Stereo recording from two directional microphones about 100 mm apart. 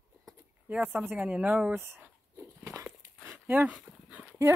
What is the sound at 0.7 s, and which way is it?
Speech, 10° right (ahead or behind).